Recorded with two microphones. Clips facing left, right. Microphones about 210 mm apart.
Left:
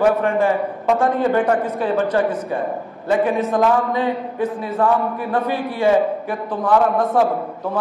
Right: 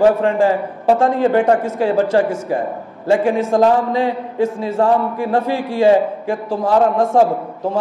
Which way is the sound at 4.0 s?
85° right.